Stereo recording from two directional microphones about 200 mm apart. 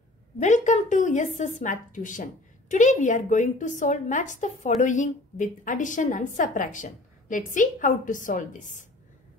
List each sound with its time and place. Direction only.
0.4 s a woman's voice: 35° left (ahead or behind)